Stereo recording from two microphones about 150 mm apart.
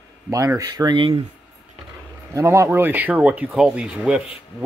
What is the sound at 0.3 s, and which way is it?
Speech, 20° right (ahead or behind).